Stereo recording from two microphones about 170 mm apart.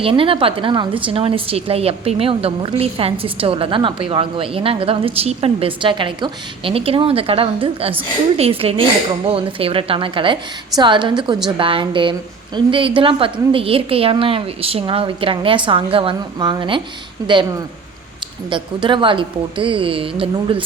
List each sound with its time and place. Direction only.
0.0 s a woman's voice: 30° right (ahead or behind)
18.5 s a woman's voice: 30° right (ahead or behind)